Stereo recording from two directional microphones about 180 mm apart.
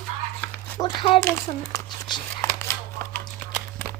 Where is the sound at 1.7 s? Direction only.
25° left (ahead or behind).